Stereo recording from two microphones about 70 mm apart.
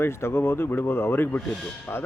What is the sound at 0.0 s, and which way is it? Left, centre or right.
Speech, left.